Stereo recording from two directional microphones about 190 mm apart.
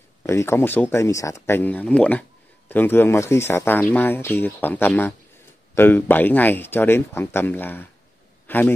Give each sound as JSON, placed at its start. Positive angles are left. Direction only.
{"t": 0.2, "sound": "a man's voice", "side_deg": 15}